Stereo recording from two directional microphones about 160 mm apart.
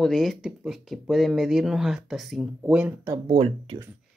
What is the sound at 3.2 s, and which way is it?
Speech, 35° right (ahead or behind).